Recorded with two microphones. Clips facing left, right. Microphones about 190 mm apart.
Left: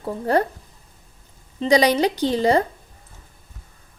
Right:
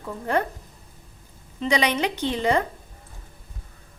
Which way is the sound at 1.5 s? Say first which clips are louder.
Left 6 dB; 35° left (ahead or behind).